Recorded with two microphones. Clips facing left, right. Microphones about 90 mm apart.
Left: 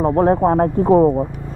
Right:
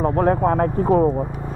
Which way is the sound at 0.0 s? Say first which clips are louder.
Left 3 dB; 35° left (ahead or behind).